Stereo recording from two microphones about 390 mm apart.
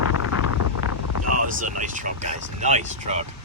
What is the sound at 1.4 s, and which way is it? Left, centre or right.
Speech, right.